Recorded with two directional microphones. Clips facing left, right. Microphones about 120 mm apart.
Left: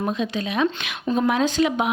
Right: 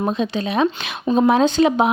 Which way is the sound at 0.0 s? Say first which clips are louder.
Right 4 dB; 30° right (ahead or behind).